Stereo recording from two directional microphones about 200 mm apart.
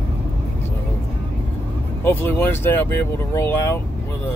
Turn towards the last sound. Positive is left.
turn(degrees=10)  # may be behind; listen again after turning